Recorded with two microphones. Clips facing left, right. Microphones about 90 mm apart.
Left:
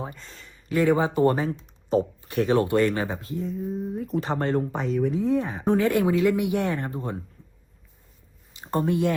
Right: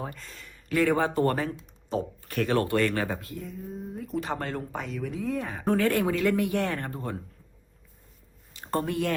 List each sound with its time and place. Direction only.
0.0 s speech: 20° left (ahead or behind)
0.3 s a sound: 35° left (ahead or behind)
0.8 s speech: 15° left (ahead or behind)
3.2 s speech: 30° left (ahead or behind)
3.6 s speech: centre (ahead or behind)
3.9 s speech: 40° left (ahead or behind)
5.3 s speech: 20° left (ahead or behind)
8.5 s speech: 15° left (ahead or behind)